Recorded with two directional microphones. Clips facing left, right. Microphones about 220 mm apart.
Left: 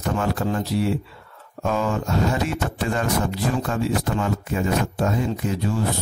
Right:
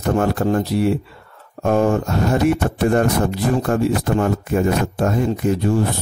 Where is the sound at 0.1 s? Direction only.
55° right (ahead or behind).